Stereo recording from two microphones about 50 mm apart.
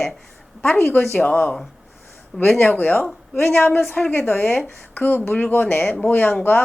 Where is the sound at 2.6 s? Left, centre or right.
Left.